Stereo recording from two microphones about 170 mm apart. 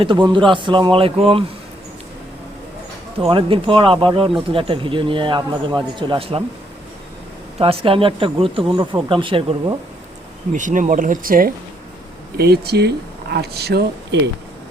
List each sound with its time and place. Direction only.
0.0 s a man's voice: 30° right (ahead or behind)
3.2 s a man's voice: 30° right (ahead or behind)
7.6 s speech: 35° right (ahead or behind)
10.5 s speech: 50° right (ahead or behind)
12.4 s speech: 70° right (ahead or behind)